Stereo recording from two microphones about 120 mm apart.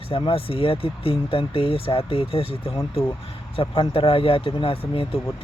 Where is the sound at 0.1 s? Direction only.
50° left (ahead or behind).